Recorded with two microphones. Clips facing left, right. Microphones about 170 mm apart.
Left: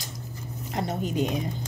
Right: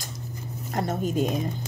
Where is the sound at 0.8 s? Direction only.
45° right (ahead or behind).